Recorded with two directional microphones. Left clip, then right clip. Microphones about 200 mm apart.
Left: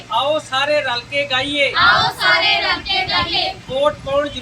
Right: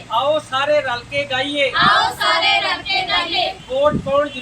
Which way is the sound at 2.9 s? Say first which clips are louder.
Left 1 dB; 35° right (ahead or behind).